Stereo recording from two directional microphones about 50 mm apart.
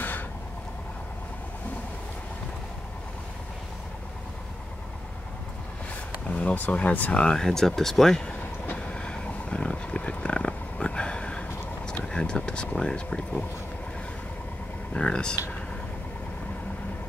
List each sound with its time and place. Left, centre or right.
6.2 s speech: left
7.2 s speech: centre
8.7 s a sound: centre
15.0 s speech: centre